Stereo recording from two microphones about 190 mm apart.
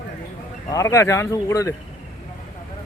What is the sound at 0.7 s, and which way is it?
Speech, 15° left (ahead or behind).